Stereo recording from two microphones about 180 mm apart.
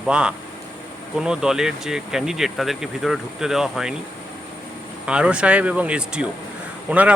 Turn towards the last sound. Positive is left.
turn(degrees=-5)  # may be behind; listen again after turning